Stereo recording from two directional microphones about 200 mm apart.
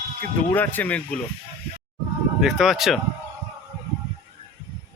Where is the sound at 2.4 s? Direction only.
Centre (ahead or behind).